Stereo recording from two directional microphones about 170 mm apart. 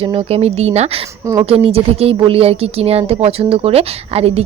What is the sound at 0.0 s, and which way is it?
A woman's voice, 35° right (ahead or behind).